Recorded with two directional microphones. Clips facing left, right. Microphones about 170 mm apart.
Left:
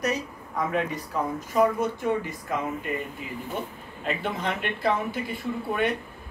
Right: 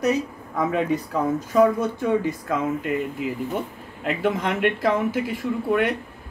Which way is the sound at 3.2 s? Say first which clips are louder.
Right 10 dB; 90° right.